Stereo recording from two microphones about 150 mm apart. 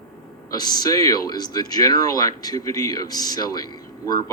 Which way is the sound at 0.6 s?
25° left (ahead or behind).